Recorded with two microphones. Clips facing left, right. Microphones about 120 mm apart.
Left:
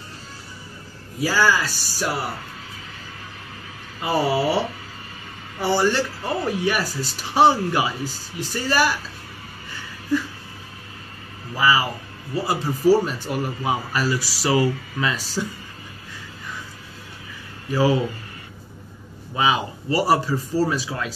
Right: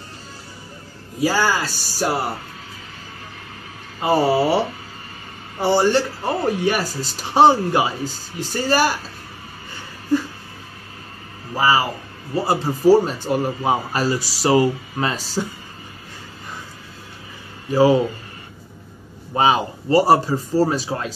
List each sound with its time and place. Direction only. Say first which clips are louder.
1.2 s speech: right 1 dB; 25° right (ahead or behind)
4.0 s speech: right 4 dB; 35° right (ahead or behind)
5.6 s speech: right 3 dB; 30° right (ahead or behind)
11.5 s speech: right 2 dB; 35° right (ahead or behind)
17.6 s speech: right 5 dB; 25° right (ahead or behind)
19.3 s a man's voice: right 4 dB; 40° right (ahead or behind)
19.9 s speech: right 5 dB; 25° right (ahead or behind)